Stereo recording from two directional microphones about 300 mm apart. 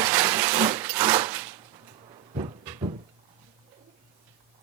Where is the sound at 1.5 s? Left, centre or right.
Centre.